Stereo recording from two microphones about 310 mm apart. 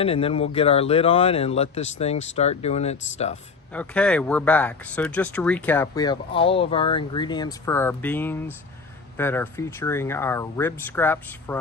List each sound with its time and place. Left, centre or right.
0.0 s speech: centre
3.7 s speech: centre